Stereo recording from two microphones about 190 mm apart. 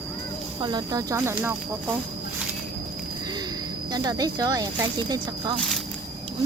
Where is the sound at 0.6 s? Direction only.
20° right (ahead or behind).